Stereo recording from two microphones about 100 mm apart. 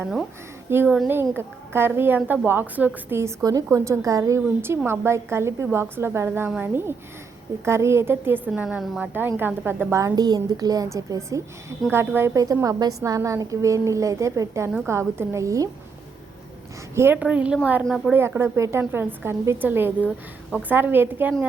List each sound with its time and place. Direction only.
0.7 s a woman's voice: 25° right (ahead or behind)
10.2 s a woman's voice: 40° right (ahead or behind)
16.9 s a woman's voice: 25° right (ahead or behind)
17.2 s a woman's voice: 10° right (ahead or behind)
17.8 s speech: centre (ahead or behind)
18.1 s a woman's voice: 25° right (ahead or behind)